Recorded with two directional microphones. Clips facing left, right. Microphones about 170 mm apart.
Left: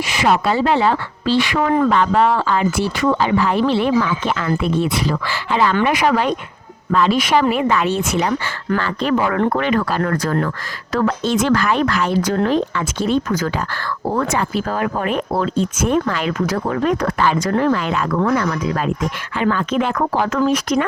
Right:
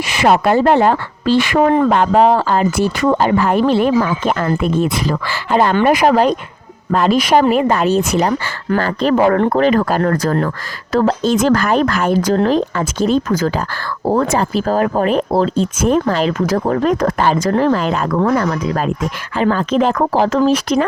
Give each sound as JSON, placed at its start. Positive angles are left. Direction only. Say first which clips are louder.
{"t": 0.1, "sound": "speech", "louder": "right 5 dB", "side_deg": -60}
{"t": 11.3, "sound": "speech", "louder": "right 1 dB", "side_deg": -45}
{"t": 12.3, "sound": "speech", "louder": "right 3 dB", "side_deg": -35}